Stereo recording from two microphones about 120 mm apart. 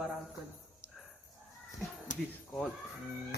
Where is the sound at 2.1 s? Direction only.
90° left.